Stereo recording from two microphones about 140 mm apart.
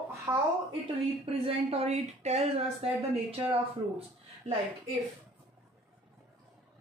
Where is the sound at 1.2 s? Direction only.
45° right (ahead or behind).